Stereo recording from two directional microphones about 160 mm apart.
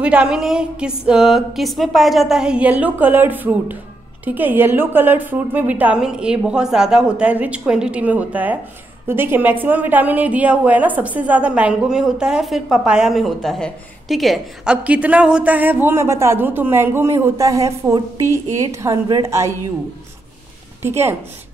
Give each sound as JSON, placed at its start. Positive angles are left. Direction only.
{"t": 0.0, "sound": "a woman's voice", "side_deg": -5}
{"t": 20.8, "sound": "a woman's voice", "side_deg": -15}